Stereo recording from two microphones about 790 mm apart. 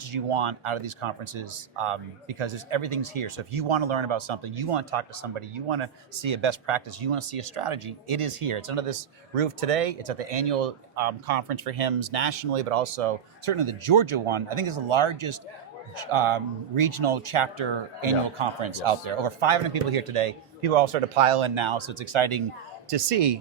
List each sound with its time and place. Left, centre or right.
0.1 s speech: right